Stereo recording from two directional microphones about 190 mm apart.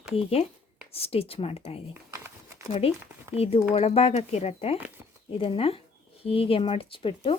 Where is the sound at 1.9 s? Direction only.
15° right (ahead or behind).